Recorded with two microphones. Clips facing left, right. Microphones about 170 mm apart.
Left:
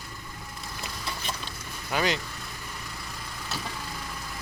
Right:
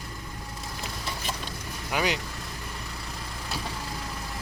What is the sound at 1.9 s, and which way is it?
Speech, 10° right (ahead or behind).